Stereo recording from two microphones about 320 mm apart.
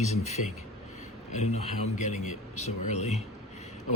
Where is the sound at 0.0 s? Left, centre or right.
Left.